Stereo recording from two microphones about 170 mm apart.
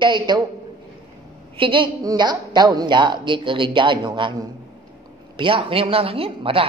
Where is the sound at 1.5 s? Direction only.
30° right (ahead or behind).